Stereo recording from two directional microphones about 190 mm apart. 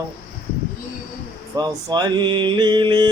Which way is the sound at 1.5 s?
20° right (ahead or behind).